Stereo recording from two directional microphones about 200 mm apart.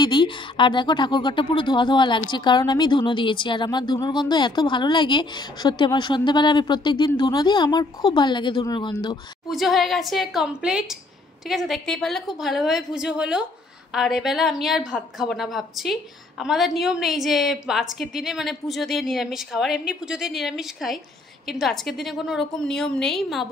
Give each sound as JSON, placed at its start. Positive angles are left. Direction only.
{"t": 0.0, "sound": "speech", "side_deg": 25}
{"t": 9.5, "sound": "a woman's voice", "side_deg": 0}